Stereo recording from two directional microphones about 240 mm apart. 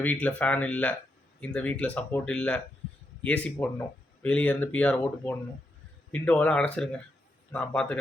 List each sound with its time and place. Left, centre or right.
0.0 s speech: centre